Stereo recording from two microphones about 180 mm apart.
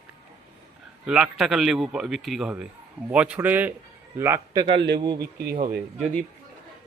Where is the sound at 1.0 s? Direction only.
5° right (ahead or behind); by 5.2 s 25° right (ahead or behind).